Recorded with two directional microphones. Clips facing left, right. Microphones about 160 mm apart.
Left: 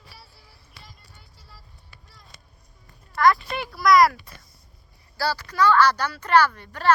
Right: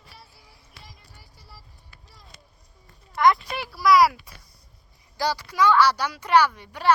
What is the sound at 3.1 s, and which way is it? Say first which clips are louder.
Speech: even; 20° right (ahead or behind).